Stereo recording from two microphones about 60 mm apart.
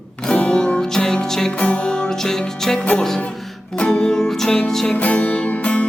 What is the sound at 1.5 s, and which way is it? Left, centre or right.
Music, centre.